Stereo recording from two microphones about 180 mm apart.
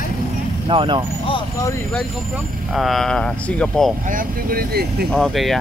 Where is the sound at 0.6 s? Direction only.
25° right (ahead or behind).